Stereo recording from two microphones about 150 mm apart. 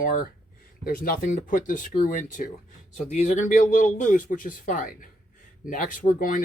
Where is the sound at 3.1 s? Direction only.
50° left (ahead or behind); by 6.4 s 65° left (ahead or behind).